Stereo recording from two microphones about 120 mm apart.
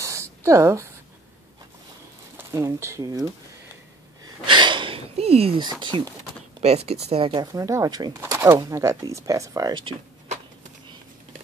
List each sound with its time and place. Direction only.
0.0 s a sound: 25° right (ahead or behind)
2.3 s speech: 25° right (ahead or behind)
4.5 s a sound: 40° right (ahead or behind)
5.6 s speech: 40° right (ahead or behind)
6.6 s speech: 60° right (ahead or behind)
7.3 s speech: 30° right (ahead or behind)
8.1 s speech: 20° right (ahead or behind); by 9.9 s 35° right (ahead or behind)